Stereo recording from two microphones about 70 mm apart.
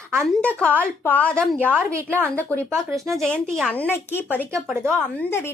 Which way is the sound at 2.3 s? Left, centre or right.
Left.